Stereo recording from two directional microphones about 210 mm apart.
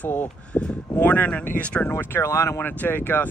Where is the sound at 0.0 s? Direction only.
5° left (ahead or behind).